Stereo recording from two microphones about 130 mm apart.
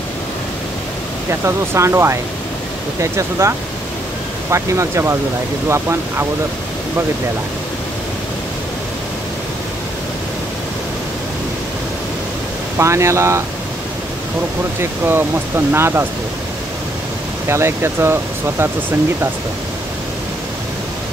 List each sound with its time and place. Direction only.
1.4 s speech: 20° right (ahead or behind)
12.7 s speech: 20° right (ahead or behind)
14.8 s speech: 15° right (ahead or behind)
17.5 s speech: 20° right (ahead or behind)